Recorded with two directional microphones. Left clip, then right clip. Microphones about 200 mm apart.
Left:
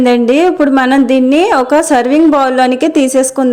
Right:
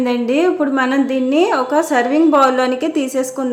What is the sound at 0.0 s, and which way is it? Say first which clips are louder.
A woman's voice: left 7 dB; 40° left (ahead or behind).